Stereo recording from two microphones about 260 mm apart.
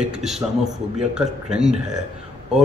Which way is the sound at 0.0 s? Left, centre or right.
Centre.